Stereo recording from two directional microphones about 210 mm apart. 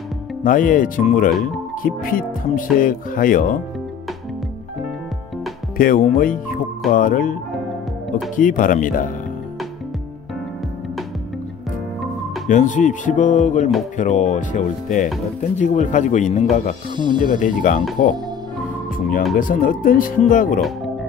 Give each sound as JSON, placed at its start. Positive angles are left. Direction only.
{"t": 0.4, "sound": "speech", "side_deg": 40}
{"t": 5.8, "sound": "speech", "side_deg": 40}
{"t": 8.4, "sound": "speech", "side_deg": 40}
{"t": 12.4, "sound": "speech", "side_deg": 35}
{"t": 16.9, "sound": "speech", "side_deg": -20}
{"t": 17.3, "sound": "speech", "side_deg": 40}
{"t": 19.3, "sound": "speech", "side_deg": 40}